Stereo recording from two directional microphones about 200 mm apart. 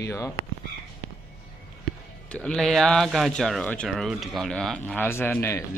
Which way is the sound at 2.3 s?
5° left (ahead or behind).